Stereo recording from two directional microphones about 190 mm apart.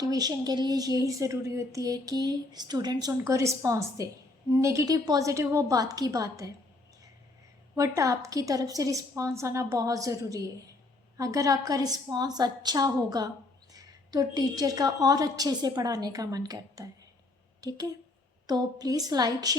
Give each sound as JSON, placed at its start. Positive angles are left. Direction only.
{"t": 0.0, "sound": "a woman's voice", "side_deg": -20}
{"t": 7.8, "sound": "a woman's voice", "side_deg": -15}